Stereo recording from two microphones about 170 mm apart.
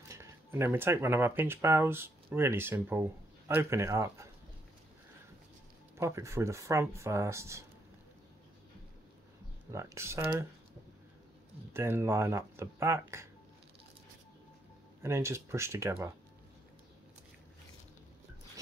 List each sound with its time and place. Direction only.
0.1 s speech: 15° right (ahead or behind)
5.9 s speech: 15° right (ahead or behind)
9.7 s speech: 15° right (ahead or behind)
11.7 s speech: 15° right (ahead or behind)
15.0 s speech: 15° right (ahead or behind)